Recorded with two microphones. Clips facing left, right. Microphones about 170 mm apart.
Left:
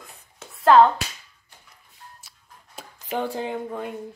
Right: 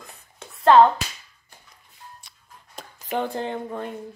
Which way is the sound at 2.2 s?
5° left (ahead or behind).